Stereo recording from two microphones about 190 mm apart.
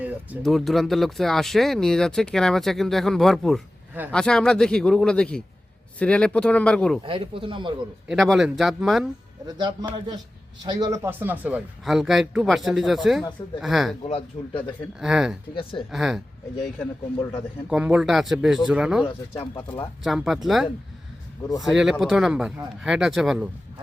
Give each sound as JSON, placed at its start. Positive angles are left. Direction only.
{"t": 0.0, "sound": "speech", "side_deg": -5}
{"t": 7.0, "sound": "speech", "side_deg": -25}
{"t": 8.0, "sound": "speech", "side_deg": 0}
{"t": 9.6, "sound": "speech", "side_deg": -25}
{"t": 14.0, "sound": "speech", "side_deg": 30}
{"t": 14.9, "sound": "speech", "side_deg": 0}
{"t": 15.5, "sound": "a woman's voice", "side_deg": 30}
{"t": 15.9, "sound": "speech", "side_deg": 0}
{"t": 17.7, "sound": "speech", "side_deg": -5}
{"t": 20.1, "sound": "speech", "side_deg": 0}